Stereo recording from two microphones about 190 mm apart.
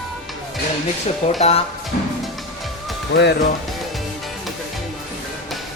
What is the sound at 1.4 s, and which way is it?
Speech, 30° left (ahead or behind).